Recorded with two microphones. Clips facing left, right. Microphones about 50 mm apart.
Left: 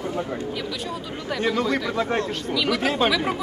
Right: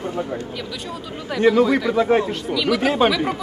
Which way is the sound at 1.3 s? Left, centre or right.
Centre.